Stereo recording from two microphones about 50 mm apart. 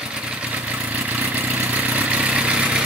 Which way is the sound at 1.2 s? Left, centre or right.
Right.